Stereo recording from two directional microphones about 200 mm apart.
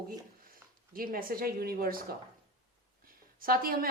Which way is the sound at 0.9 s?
45° right (ahead or behind).